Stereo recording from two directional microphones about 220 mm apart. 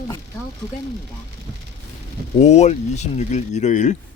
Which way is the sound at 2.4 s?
30° left (ahead or behind).